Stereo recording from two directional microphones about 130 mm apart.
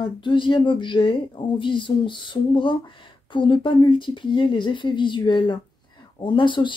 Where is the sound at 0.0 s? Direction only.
40° left (ahead or behind).